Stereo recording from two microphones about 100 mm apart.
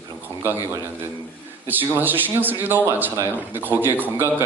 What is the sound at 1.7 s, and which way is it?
Speech, 20° right (ahead or behind).